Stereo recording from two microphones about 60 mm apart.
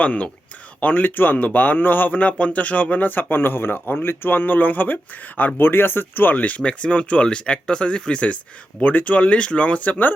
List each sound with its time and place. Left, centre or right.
0.0 s speech: left